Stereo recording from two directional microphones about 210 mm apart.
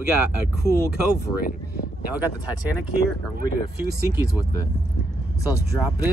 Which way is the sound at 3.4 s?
45° right (ahead or behind).